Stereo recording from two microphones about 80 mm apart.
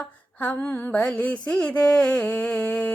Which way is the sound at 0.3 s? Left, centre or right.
Left.